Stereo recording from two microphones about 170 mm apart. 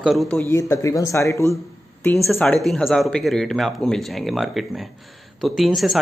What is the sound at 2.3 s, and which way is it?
A man's voice, 5° left (ahead or behind).